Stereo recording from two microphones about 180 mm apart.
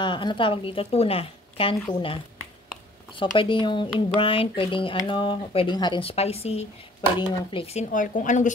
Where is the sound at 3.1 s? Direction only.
25° left (ahead or behind).